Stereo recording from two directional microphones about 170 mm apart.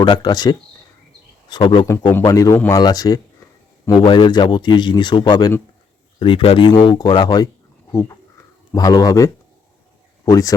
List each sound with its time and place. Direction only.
0.0 s a man's voice: 25° left (ahead or behind)
8.7 s a man's voice: 20° left (ahead or behind)